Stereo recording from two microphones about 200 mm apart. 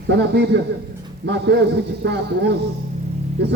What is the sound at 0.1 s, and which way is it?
Speech, 55° right (ahead or behind).